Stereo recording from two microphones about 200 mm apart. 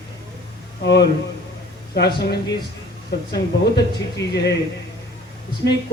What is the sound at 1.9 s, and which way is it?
A man's voice, 55° left (ahead or behind).